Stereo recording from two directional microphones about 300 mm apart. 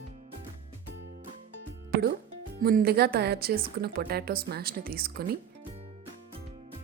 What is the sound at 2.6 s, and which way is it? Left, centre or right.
A woman's voice, right.